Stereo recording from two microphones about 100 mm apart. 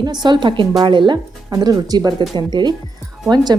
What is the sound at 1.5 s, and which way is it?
Speech, 40° right (ahead or behind).